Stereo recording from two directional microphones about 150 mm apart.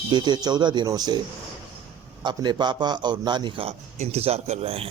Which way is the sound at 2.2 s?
30° right (ahead or behind).